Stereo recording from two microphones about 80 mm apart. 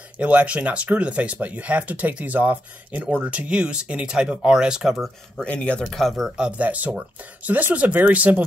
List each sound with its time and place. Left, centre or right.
0.2 s speech: centre
5.4 s speech: centre
5.9 s speech: centre